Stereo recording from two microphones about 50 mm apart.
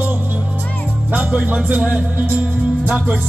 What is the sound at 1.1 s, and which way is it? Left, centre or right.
Speech, right.